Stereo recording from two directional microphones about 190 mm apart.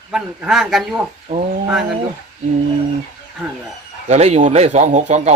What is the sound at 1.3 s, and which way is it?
Speech, 40° right (ahead or behind).